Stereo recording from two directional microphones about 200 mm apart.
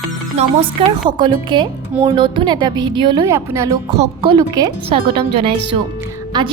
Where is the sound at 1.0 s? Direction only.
25° right (ahead or behind).